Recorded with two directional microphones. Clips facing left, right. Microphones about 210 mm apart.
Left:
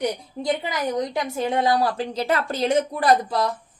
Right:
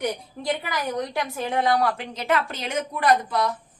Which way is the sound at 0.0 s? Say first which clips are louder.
Left 2 dB; 20° left (ahead or behind).